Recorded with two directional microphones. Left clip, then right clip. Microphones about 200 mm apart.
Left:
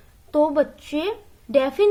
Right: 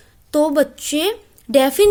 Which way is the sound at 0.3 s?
35° right (ahead or behind).